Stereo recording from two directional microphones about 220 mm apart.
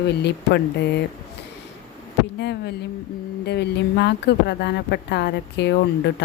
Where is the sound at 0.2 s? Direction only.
50° left (ahead or behind).